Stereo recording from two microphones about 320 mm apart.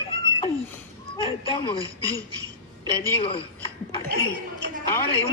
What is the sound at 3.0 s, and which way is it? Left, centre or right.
Speech, centre.